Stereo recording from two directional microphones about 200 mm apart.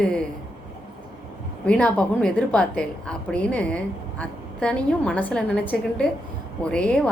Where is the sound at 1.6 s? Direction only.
5° left (ahead or behind).